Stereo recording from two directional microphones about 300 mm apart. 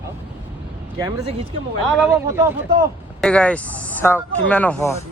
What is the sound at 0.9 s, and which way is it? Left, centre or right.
Speech, centre.